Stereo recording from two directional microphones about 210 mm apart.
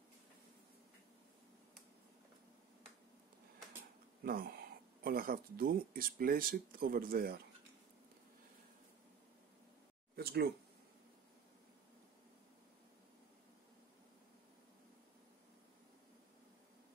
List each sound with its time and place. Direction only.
4.2 s speech: 45° right (ahead or behind)
10.1 s speech: 50° right (ahead or behind)